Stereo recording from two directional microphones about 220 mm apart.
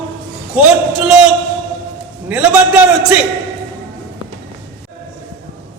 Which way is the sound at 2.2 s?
5° right (ahead or behind).